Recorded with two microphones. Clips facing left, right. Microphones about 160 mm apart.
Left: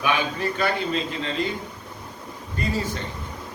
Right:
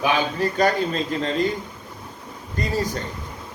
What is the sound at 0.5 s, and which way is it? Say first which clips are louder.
Speech: right 4 dB; 40° right (ahead or behind).